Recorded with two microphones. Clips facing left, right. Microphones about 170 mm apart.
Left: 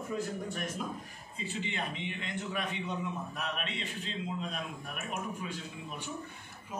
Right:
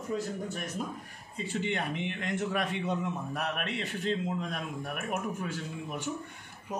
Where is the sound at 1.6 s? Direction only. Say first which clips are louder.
Right 6 dB; 65° right (ahead or behind).